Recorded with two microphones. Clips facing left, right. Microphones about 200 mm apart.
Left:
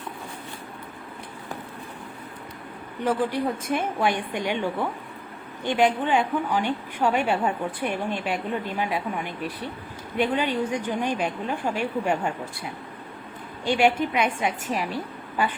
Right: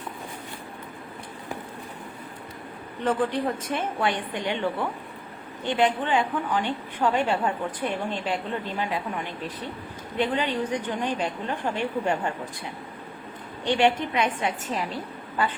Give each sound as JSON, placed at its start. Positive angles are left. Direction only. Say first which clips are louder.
{"t": 3.0, "sound": "a woman's voice", "louder": "even", "side_deg": 10}
{"t": 13.7, "sound": "a woman's voice", "louder": "left 1 dB", "side_deg": 10}